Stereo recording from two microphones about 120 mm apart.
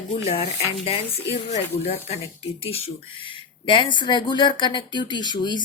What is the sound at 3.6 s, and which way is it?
Speech, 45° left (ahead or behind).